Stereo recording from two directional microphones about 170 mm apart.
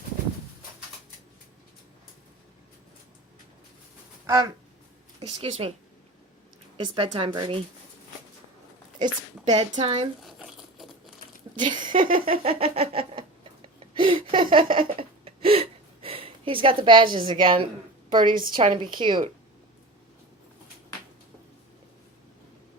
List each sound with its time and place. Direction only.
5.2 s speech: 35° right (ahead or behind)
6.7 s a woman's voice: 30° right (ahead or behind)
9.0 s a woman's voice: 25° right (ahead or behind)
9.8 s speech: 35° right (ahead or behind)
10.2 s crumpling: centre (ahead or behind)
11.5 s speech: 25° right (ahead or behind)
11.9 s a sound: 55° right (ahead or behind)
12.2 s a sound: 35° right (ahead or behind)
18.1 s a woman's voice: 25° right (ahead or behind)